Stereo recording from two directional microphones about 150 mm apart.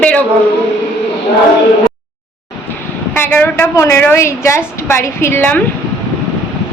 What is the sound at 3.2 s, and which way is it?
A woman's voice, 15° left (ahead or behind).